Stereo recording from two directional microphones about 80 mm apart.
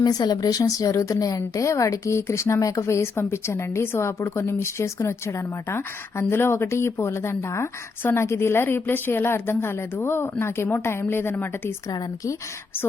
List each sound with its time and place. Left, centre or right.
0.0 s speech: left
0.6 s a woman's voice: left
11.9 s speech: left